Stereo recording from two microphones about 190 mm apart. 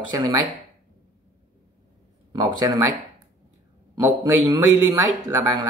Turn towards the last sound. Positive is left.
turn(degrees=-15)  # may be behind; listen again after turning